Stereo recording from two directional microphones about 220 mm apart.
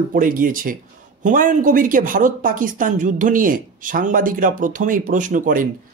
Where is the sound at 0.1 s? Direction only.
40° right (ahead or behind).